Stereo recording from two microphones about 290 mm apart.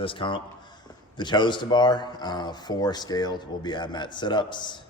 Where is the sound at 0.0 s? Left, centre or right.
Centre.